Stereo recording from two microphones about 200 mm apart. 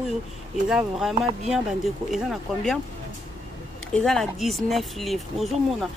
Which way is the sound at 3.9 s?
5° left (ahead or behind).